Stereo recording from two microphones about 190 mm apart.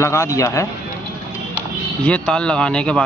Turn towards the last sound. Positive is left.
turn(degrees=5)  # may be behind; listen again after turning